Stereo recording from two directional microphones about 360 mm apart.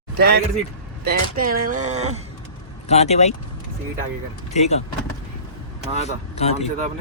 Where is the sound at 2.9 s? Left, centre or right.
Centre.